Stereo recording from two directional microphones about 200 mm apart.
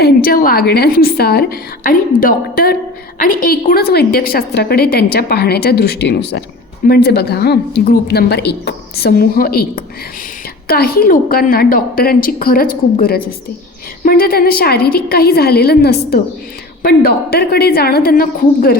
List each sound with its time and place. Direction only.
0.0 s a woman's voice: 50° left (ahead or behind)